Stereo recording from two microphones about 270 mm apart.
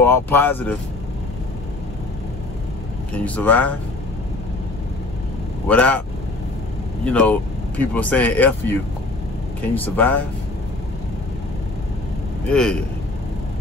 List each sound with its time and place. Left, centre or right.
0.0 s speech: centre
3.1 s speech: centre
5.7 s speech: centre
7.1 s speech: centre
12.4 s speech: centre